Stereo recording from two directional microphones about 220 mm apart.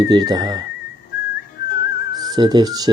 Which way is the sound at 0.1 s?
20° right (ahead or behind).